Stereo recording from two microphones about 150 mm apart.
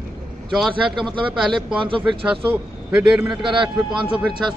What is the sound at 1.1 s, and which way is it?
A man's voice, centre (ahead or behind).